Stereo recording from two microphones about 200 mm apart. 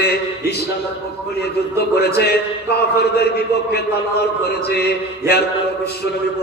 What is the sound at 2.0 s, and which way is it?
Speech, 55° left (ahead or behind).